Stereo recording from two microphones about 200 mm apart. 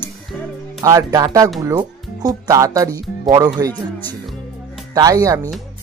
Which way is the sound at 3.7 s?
10° left (ahead or behind).